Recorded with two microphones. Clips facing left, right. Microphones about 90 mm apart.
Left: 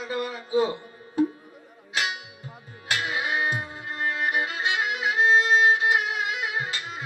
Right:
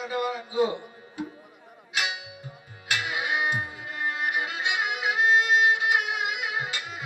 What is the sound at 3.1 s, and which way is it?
Music, 35° left (ahead or behind).